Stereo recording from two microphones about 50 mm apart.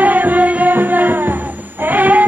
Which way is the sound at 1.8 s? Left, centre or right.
Right.